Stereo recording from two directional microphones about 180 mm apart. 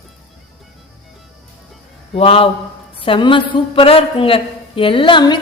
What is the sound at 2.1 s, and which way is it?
A man's voice, 30° left (ahead or behind).